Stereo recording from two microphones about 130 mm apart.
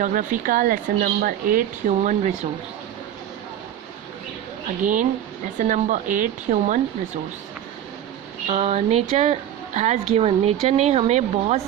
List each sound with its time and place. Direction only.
0.0 s speech: 85° right; by 2.3 s 65° right (ahead or behind)
5.5 s speech: 75° right (ahead or behind)
8.4 s speech: 55° right (ahead or behind)